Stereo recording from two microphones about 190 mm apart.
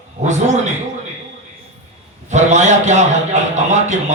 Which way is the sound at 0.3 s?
40° right (ahead or behind).